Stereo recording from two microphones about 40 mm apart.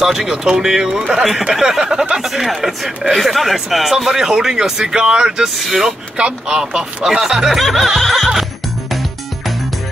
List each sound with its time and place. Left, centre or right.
0.0 s speech: centre
5.6 s music: centre
6.1 s speech: right
6.6 s speech: centre
7.5 s music: centre